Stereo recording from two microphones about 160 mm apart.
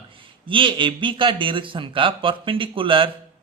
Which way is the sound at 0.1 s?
35° right (ahead or behind).